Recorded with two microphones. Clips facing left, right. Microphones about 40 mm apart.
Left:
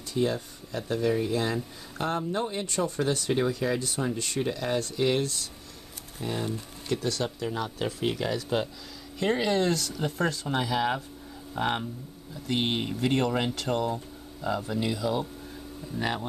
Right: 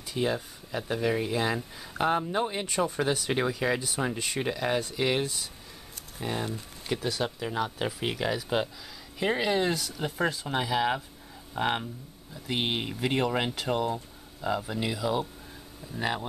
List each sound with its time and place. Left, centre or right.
0.1 s speech: centre